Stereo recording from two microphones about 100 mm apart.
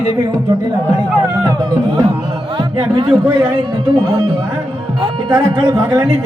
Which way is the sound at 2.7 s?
60° right (ahead or behind).